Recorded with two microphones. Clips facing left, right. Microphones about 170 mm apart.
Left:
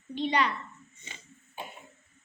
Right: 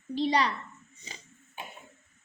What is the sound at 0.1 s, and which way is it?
Speech, 35° right (ahead or behind).